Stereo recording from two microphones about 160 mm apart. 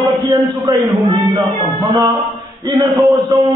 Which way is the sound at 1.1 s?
30° right (ahead or behind).